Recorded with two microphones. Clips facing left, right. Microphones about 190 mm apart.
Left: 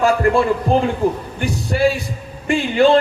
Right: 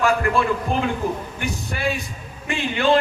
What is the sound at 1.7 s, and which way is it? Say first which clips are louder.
Speech: left 17 dB; 30° left (ahead or behind).